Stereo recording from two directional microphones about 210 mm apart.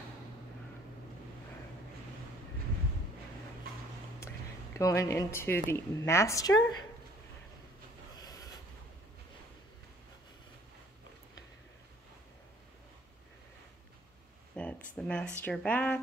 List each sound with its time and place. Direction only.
4.7 s a woman's voice: 15° left (ahead or behind)
8.2 s train: 15° left (ahead or behind)
14.5 s a sound: 5° left (ahead or behind)
15.0 s a woman's voice: 5° left (ahead or behind)